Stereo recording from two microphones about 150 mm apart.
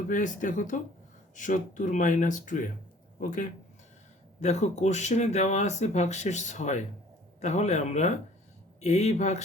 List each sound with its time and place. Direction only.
0.1 s speech: 60° left (ahead or behind)